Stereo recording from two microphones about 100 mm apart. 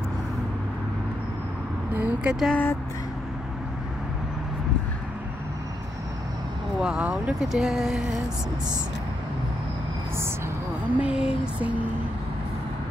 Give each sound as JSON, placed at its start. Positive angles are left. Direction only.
{"t": 2.0, "sound": "speech", "side_deg": -15}
{"t": 2.5, "sound": "speech", "side_deg": 20}
{"t": 6.8, "sound": "speech", "side_deg": -10}
{"t": 11.0, "sound": "speech", "side_deg": -10}